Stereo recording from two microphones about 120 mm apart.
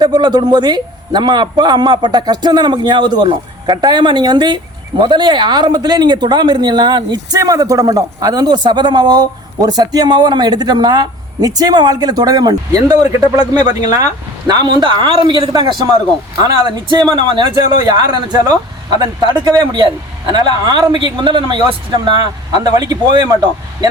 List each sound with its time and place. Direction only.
0.0 s a man's voice: 35° right (ahead or behind)
16.9 s a man's voice: 35° right (ahead or behind)